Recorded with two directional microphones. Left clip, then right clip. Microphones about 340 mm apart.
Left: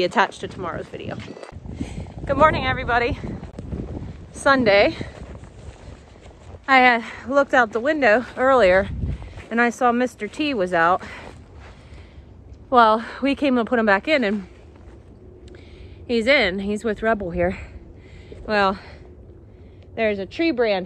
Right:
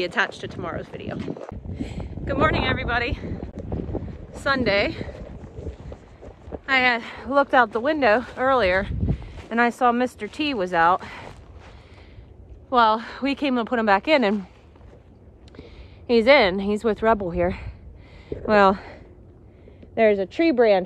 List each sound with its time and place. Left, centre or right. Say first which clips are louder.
0.0 s a woman's voice: left 4 dB; centre
6.6 s speech: left 5 dB; centre
12.6 s speech: left 3 dB; centre
16.1 s a woman's voice: right 2 dB; centre
18.5 s speech: right 3 dB; right
20.0 s speech: right 3 dB; right